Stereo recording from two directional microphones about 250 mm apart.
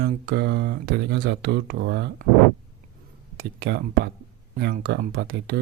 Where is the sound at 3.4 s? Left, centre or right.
Right.